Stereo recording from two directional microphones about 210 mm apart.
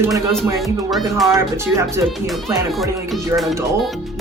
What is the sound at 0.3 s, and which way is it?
Speech, centre (ahead or behind).